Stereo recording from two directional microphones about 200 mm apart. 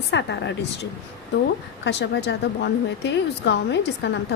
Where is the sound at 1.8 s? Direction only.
60° left (ahead or behind).